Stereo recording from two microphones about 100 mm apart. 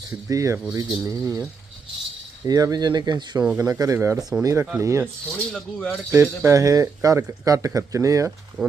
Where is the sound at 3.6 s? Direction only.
35° right (ahead or behind).